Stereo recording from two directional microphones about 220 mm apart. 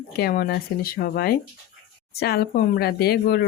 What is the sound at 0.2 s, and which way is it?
Speech, 45° left (ahead or behind).